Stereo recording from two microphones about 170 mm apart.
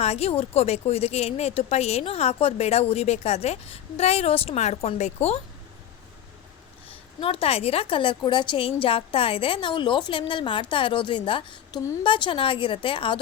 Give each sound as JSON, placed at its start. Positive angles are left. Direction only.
{"t": 0.0, "sound": "speech", "side_deg": 40}
{"t": 7.2, "sound": "a woman's voice", "side_deg": 35}